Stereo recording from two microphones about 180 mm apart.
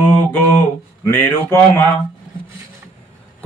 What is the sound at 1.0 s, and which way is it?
Speech, 15° left (ahead or behind).